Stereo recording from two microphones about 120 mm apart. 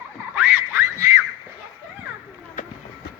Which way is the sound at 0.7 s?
25° right (ahead or behind).